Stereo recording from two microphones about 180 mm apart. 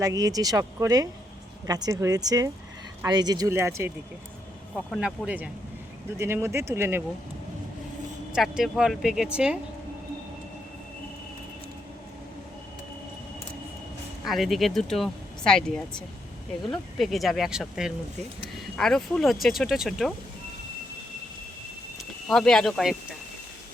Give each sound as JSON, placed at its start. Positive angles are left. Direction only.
{"t": 0.0, "sound": "speech", "side_deg": -20}
{"t": 4.7, "sound": "speech", "side_deg": 0}
{"t": 8.3, "sound": "speech", "side_deg": -5}
{"t": 14.3, "sound": "speech", "side_deg": 0}
{"t": 22.3, "sound": "speech", "side_deg": 5}